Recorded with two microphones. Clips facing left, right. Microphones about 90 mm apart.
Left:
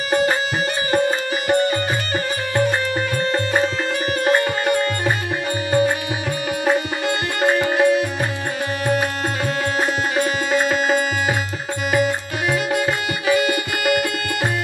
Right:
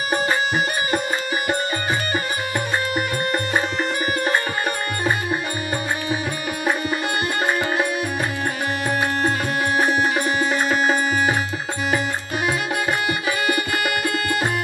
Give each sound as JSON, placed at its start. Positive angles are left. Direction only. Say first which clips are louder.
{"t": 0.1, "sound": "music", "louder": "left 3 dB", "side_deg": -20}
{"t": 4.2, "sound": "music", "louder": "left 4 dB", "side_deg": -20}
{"t": 7.4, "sound": "music", "louder": "left 9 dB", "side_deg": -20}